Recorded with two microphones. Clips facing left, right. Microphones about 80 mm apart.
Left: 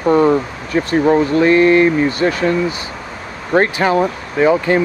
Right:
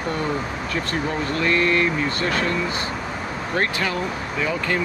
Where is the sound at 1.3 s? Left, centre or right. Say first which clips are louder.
Left 7 dB; left.